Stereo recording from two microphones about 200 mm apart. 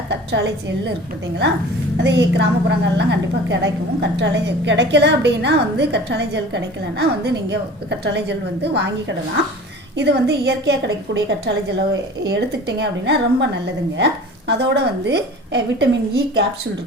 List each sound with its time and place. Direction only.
0.1 s a woman's voice: 60° right (ahead or behind)
2.0 s a woman's voice: 60° right (ahead or behind)